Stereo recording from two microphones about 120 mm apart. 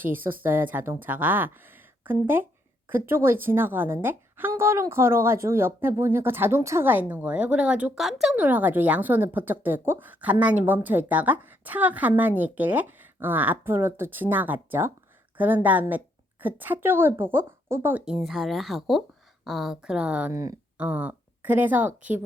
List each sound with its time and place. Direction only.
0.0 s a woman's voice: 15° right (ahead or behind)
8.4 s speech: 15° right (ahead or behind)
18.0 s speech: centre (ahead or behind)
20.3 s a woman's voice: 25° right (ahead or behind)
20.7 s a woman's voice: 15° right (ahead or behind)